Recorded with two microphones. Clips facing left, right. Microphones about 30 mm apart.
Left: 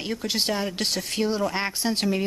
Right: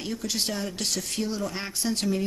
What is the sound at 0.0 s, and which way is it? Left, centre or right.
A woman's voice, left.